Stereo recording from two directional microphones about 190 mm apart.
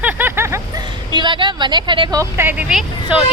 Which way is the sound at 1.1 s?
25° right (ahead or behind).